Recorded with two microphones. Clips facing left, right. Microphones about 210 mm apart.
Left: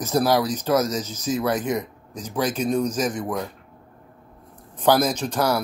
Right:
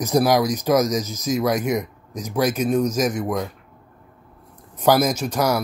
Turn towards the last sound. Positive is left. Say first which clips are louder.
# right 1 dB
turn(degrees=-10)  # may be behind; listen again after turning